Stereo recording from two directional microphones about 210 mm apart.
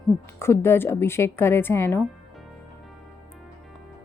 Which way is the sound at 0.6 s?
10° left (ahead or behind).